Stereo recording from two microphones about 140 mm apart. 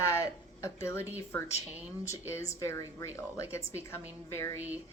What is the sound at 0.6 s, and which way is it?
A woman's voice, 20° left (ahead or behind).